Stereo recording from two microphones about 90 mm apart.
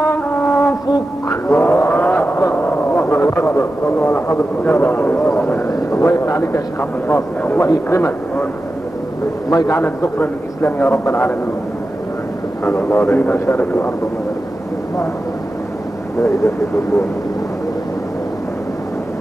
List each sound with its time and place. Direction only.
0.1 s music: 30° left (ahead or behind)
0.9 s a sound: 35° left (ahead or behind)
1.6 s vehicle: 25° left (ahead or behind)
5.7 s vehicle: 35° left (ahead or behind)
9.5 s a man's voice: 45° left (ahead or behind)
9.8 s a man's voice: 20° left (ahead or behind)
12.6 s a man's voice: 20° left (ahead or behind)
16.2 s speech: 35° left (ahead or behind)